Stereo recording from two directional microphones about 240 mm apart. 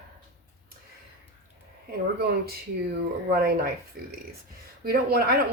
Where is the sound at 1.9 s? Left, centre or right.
Right.